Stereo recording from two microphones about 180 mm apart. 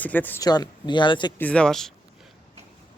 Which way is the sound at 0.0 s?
10° left (ahead or behind).